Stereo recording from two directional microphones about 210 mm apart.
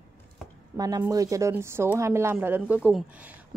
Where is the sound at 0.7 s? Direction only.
20° right (ahead or behind).